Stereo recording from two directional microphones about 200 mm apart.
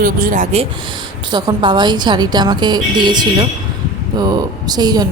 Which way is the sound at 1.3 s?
20° right (ahead or behind).